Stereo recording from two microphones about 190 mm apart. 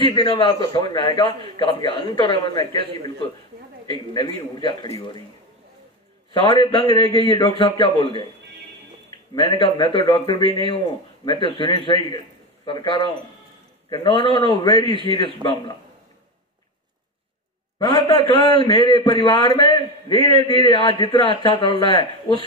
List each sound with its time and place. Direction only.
0.1 s a man's voice: 25° left (ahead or behind)
6.3 s a man's voice: 25° left (ahead or behind)
9.3 s a man's voice: 25° left (ahead or behind)
15.4 s a man's voice: 25° right (ahead or behind)
17.7 s a man's voice: 20° left (ahead or behind)